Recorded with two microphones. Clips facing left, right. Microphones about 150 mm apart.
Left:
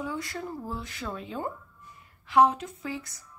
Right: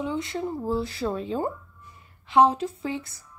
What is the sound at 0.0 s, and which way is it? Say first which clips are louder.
Speech: right 5 dB; 20° right (ahead or behind).